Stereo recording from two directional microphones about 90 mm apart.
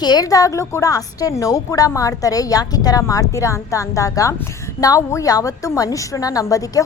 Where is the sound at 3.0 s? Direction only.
35° left (ahead or behind).